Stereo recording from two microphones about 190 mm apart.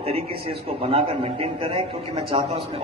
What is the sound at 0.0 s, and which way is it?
A man's voice, 30° right (ahead or behind).